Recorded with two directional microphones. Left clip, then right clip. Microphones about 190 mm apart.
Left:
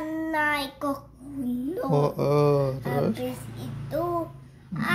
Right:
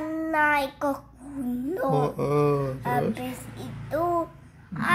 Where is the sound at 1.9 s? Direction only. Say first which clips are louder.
Left 3 dB; 15° left (ahead or behind).